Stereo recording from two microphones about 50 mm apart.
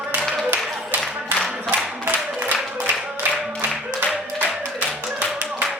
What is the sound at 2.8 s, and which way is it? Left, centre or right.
Music, centre.